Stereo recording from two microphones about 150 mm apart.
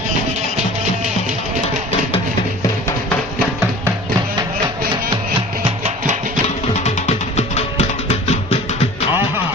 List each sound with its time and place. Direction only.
6.7 s music: 45° left (ahead or behind)